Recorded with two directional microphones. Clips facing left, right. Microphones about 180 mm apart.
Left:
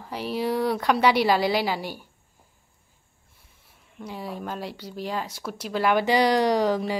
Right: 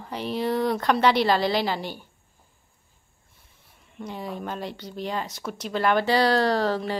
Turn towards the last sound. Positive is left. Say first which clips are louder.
# left 2 dB
turn(degrees=10)  # may be behind; listen again after turning